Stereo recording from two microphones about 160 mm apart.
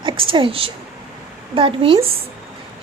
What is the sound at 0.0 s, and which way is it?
Speech, 30° right (ahead or behind).